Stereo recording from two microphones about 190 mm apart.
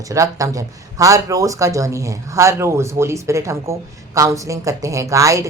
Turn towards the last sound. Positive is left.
turn(degrees=-15)  # may be behind; listen again after turning